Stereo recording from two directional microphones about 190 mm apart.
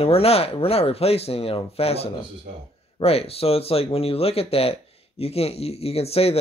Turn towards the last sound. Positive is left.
turn(degrees=30)  # may be behind; listen again after turning